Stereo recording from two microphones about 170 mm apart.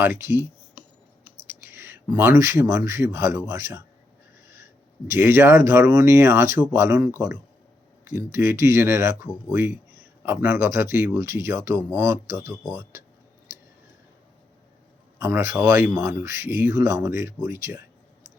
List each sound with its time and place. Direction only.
0.0 s speech: 15° right (ahead or behind)
1.6 s speech: 15° right (ahead or behind)
15.2 s speech: 15° right (ahead or behind)